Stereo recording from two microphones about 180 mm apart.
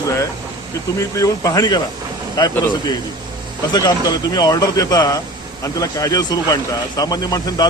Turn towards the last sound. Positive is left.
turn(degrees=20)  # may be behind; listen again after turning